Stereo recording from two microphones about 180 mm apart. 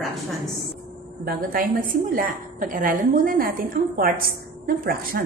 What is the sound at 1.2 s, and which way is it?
A woman's voice, 50° right (ahead or behind).